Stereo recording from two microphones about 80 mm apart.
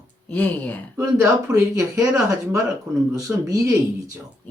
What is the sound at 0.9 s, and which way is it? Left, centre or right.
Speech, right.